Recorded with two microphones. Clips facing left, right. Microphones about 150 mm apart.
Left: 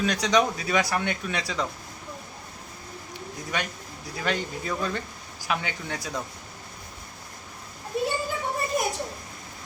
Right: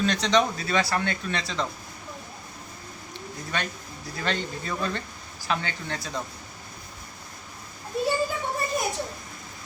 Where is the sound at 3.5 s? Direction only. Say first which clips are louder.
Even; 15° left (ahead or behind).